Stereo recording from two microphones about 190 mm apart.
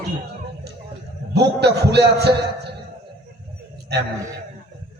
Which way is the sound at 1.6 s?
60° right (ahead or behind).